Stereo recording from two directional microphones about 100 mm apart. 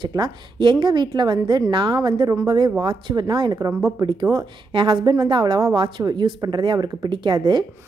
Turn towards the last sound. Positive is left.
turn(degrees=-50)  # may be behind; listen again after turning